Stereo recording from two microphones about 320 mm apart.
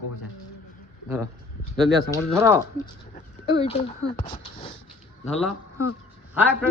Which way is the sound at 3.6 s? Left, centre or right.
Centre.